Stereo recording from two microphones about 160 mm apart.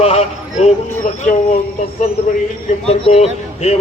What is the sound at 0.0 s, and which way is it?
Speech, 40° left (ahead or behind).